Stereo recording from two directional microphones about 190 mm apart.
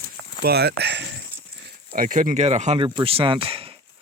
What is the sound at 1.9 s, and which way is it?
Speech, 45° right (ahead or behind).